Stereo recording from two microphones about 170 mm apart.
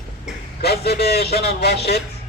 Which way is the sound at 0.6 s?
70° left (ahead or behind).